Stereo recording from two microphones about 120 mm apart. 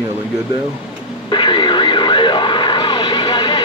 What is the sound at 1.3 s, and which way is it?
Radio, 40° left (ahead or behind).